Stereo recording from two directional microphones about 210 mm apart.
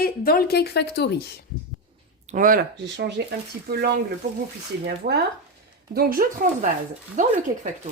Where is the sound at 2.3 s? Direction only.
40° right (ahead or behind).